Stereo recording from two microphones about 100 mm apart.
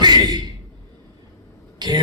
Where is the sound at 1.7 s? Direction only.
45° right (ahead or behind).